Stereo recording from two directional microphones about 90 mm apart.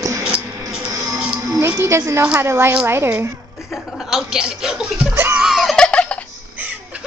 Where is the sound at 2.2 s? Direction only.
25° right (ahead or behind).